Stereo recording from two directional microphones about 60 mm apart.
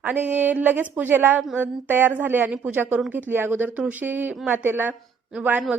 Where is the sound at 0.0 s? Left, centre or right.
Right.